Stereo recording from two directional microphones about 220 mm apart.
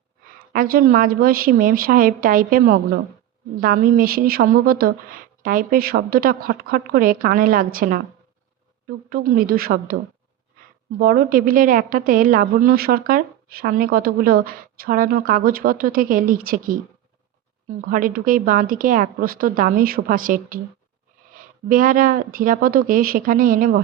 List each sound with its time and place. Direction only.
0.3 s a woman's voice: 40° right (ahead or behind)
9.0 s a woman's voice: 40° right (ahead or behind)
17.7 s a woman's voice: 40° right (ahead or behind)